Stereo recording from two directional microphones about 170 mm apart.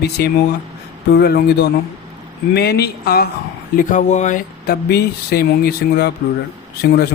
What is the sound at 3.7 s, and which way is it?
Speech, 45° left (ahead or behind).